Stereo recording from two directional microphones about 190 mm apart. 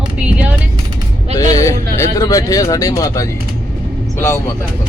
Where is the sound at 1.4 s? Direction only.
20° left (ahead or behind).